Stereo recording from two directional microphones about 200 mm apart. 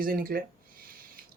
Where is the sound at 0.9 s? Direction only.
45° right (ahead or behind).